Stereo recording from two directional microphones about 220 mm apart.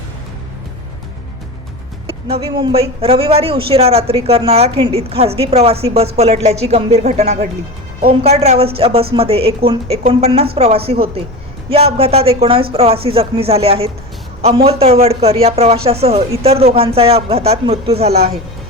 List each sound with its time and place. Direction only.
2.0 s speech: 25° right (ahead or behind)